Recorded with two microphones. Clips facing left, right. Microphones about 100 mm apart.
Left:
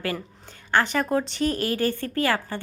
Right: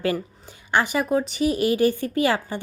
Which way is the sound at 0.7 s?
10° right (ahead or behind).